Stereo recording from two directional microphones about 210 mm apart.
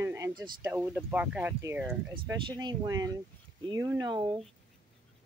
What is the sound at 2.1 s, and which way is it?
Speech, 20° right (ahead or behind).